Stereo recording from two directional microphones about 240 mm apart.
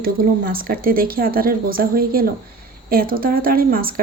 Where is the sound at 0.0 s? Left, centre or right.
Right.